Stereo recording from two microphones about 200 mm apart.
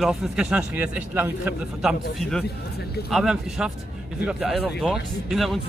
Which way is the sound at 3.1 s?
5° right (ahead or behind).